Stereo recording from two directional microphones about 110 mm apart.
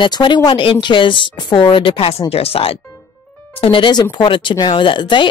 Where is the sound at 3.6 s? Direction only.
50° left (ahead or behind).